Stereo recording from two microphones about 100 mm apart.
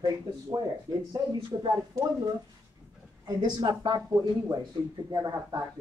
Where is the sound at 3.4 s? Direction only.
50° right (ahead or behind).